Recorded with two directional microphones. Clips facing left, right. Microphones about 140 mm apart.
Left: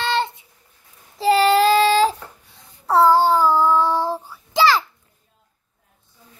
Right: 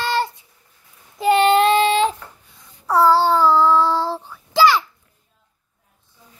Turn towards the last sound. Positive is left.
turn(degrees=15)  # may be behind; listen again after turning